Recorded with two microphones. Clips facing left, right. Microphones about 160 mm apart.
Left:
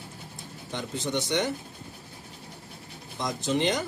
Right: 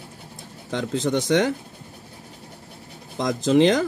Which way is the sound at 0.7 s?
90° right.